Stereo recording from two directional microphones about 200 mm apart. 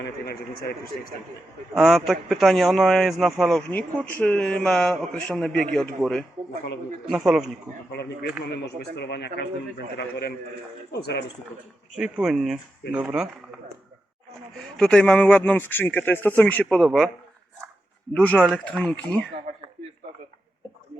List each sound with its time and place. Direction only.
0.0 s a man's voice: 50° left (ahead or behind)
1.7 s a man's voice: centre (ahead or behind)
7.9 s a man's voice: 55° left (ahead or behind)
11.9 s a man's voice: 5° right (ahead or behind)
14.5 s speech: centre (ahead or behind)
18.1 s a man's voice: 5° left (ahead or behind)
19.5 s a sound: 40° right (ahead or behind)